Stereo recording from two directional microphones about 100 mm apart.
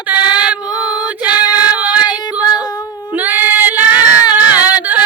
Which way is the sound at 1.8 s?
10° right (ahead or behind).